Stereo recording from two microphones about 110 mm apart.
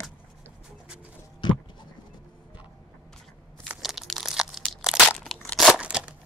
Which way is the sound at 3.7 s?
5° right (ahead or behind).